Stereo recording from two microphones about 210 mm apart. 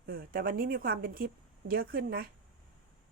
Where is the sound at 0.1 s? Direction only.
45° right (ahead or behind).